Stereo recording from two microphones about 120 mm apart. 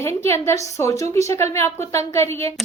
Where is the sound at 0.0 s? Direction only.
25° left (ahead or behind).